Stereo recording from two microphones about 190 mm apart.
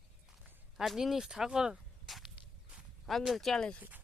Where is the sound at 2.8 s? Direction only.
Centre (ahead or behind).